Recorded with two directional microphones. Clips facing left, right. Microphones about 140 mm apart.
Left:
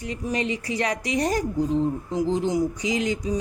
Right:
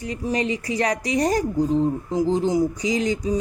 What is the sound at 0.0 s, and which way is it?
Speech, 35° right (ahead or behind).